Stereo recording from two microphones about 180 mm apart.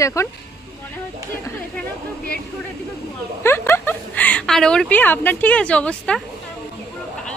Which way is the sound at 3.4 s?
15° left (ahead or behind).